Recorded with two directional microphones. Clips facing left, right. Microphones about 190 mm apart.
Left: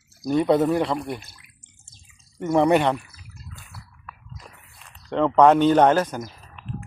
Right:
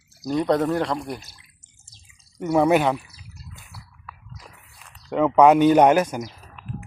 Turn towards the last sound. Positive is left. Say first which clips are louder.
# right 1 dB
turn(degrees=-15)  # may be behind; listen again after turning